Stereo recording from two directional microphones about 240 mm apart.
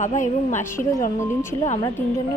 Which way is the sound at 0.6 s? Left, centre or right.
Centre.